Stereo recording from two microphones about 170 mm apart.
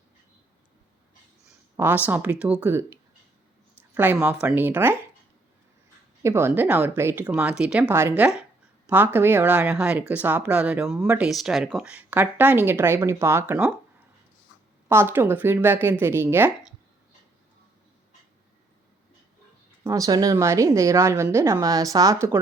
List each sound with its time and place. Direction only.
1.7 s speech: 15° right (ahead or behind)
6.2 s speech: 15° right (ahead or behind)
11.3 s speech: centre (ahead or behind)
14.8 s speech: 15° right (ahead or behind)
19.8 s a woman's voice: 20° right (ahead or behind)